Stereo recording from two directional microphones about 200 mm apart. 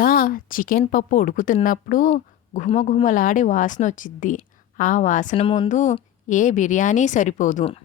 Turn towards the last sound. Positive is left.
turn(degrees=35)  # may be behind; listen again after turning